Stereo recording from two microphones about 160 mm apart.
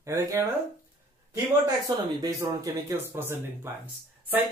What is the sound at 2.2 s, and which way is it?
Speech, 20° right (ahead or behind).